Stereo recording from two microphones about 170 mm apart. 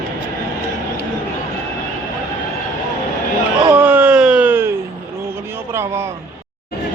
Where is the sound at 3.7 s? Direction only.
10° right (ahead or behind).